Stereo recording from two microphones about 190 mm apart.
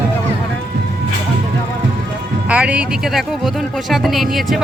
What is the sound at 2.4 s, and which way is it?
Speech, 5° right (ahead or behind).